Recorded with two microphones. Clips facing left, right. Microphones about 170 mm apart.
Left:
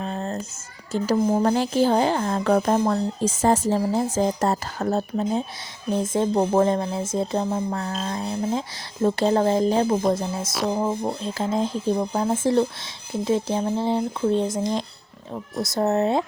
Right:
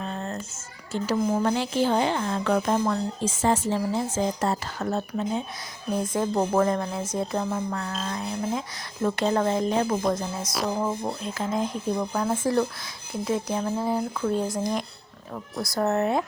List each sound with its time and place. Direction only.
0.0 s a sound: 35° left (ahead or behind)
0.9 s speech: 40° left (ahead or behind); by 11.1 s 20° left (ahead or behind)
11.2 s speech: 30° left (ahead or behind)